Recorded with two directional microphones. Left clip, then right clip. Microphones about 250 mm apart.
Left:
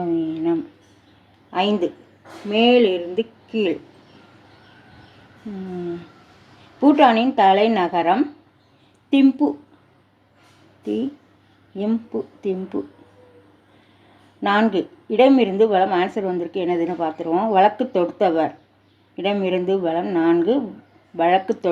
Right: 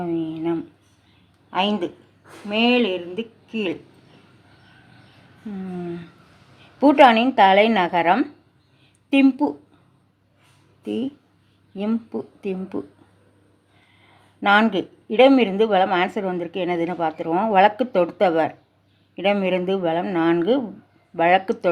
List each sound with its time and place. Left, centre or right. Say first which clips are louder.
0.0 s a sound: left 3 dB; centre
1.5 s a woman's voice: left 2 dB; centre
6.7 s a woman's voice: right 1 dB; centre
11.8 s a woman's voice: left 2 dB; centre
14.4 s a woman's voice: right 2 dB; centre